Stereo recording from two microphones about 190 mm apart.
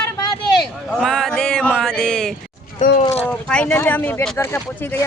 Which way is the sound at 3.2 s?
5° left (ahead or behind).